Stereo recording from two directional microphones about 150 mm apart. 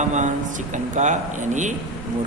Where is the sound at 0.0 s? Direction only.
55° right (ahead or behind).